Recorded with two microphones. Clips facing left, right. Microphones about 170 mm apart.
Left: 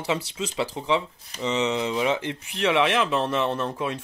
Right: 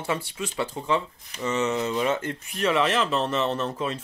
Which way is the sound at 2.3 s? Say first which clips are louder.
Left 1 dB; 75° left (ahead or behind).